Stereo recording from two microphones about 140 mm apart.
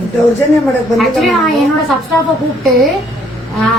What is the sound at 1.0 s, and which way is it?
Speech, centre (ahead or behind).